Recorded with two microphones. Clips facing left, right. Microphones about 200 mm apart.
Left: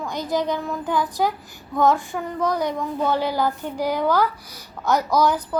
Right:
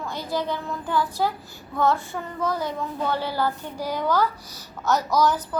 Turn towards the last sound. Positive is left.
turn(degrees=10)  # may be behind; listen again after turning